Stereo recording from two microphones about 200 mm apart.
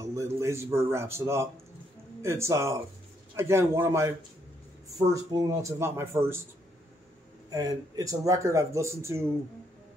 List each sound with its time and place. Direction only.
0.0 s a man's voice: 15° right (ahead or behind)
5.1 s speech: 20° right (ahead or behind)
7.4 s speech: 20° right (ahead or behind)